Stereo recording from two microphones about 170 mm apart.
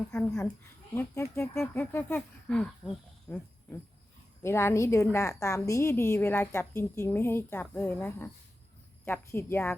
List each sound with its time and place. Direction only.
0.1 s a woman's voice: 5° left (ahead or behind)
3.2 s a sound: 10° left (ahead or behind)
4.4 s a woman's voice: 15° left (ahead or behind)